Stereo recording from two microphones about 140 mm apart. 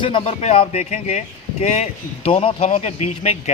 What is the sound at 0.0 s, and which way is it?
A man's voice, 40° left (ahead or behind).